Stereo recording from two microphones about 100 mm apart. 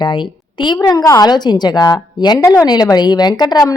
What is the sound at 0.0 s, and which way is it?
A woman's voice, 50° left (ahead or behind).